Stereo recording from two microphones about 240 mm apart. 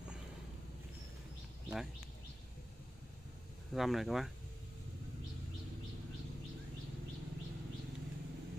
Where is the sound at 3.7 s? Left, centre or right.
Centre.